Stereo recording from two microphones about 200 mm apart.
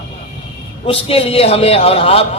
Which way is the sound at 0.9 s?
30° left (ahead or behind).